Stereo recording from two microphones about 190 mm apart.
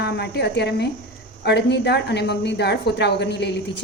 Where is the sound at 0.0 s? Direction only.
60° left (ahead or behind).